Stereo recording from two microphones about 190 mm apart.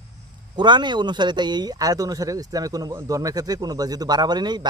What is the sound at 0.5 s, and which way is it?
Speech, 25° right (ahead or behind).